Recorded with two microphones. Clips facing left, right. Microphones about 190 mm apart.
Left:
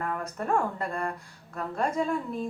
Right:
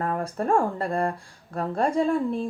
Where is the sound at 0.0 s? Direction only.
30° right (ahead or behind).